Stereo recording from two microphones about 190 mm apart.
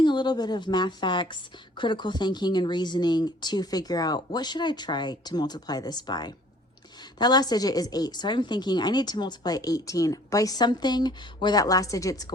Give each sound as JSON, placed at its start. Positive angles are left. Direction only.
{"t": 0.0, "sound": "a woman's voice", "side_deg": 25}